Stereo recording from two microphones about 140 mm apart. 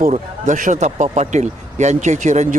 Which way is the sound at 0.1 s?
65° right (ahead or behind).